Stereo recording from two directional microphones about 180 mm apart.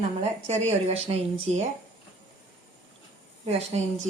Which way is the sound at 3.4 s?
35° right (ahead or behind).